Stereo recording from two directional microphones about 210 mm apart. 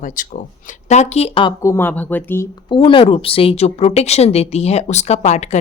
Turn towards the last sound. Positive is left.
turn(degrees=35)  # may be behind; listen again after turning